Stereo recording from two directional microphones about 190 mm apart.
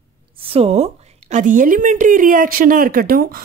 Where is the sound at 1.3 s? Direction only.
45° right (ahead or behind).